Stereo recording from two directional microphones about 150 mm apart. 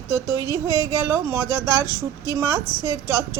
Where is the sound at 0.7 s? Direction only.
20° left (ahead or behind).